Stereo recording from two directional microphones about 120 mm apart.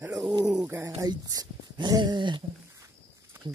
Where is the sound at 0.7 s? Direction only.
20° right (ahead or behind).